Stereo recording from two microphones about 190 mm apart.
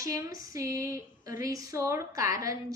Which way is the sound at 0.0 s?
15° right (ahead or behind).